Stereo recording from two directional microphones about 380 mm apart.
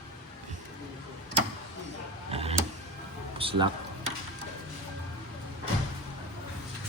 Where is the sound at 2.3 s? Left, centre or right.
Centre.